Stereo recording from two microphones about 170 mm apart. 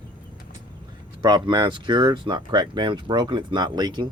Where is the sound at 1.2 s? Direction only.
25° right (ahead or behind).